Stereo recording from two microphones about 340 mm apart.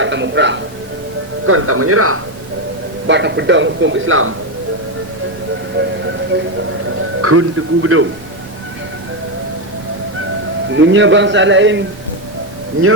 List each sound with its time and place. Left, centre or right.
0.0 s a man's voice: right
7.2 s a man's voice: right
10.7 s a man's voice: right